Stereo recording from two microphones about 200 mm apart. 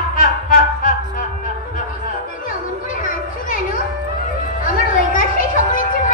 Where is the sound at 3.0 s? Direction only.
40° left (ahead or behind).